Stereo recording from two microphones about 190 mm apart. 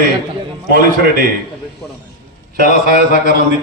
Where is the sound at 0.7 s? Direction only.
50° right (ahead or behind).